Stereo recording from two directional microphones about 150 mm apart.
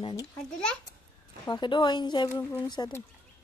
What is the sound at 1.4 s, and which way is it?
A child's voice, 30° left (ahead or behind).